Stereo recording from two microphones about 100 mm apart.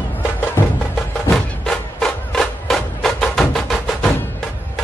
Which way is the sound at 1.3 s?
5° left (ahead or behind).